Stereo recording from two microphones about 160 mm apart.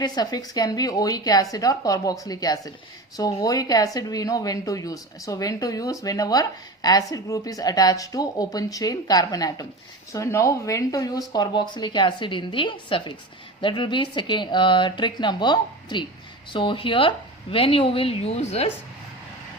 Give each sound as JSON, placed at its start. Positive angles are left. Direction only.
{"t": 0.0, "sound": "speech", "side_deg": 25}